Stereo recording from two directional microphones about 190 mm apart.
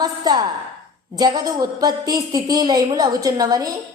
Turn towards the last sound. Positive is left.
turn(degrees=-20)  # may be behind; listen again after turning